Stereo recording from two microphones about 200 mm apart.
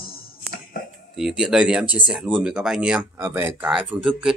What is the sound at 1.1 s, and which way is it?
Speech, 5° right (ahead or behind).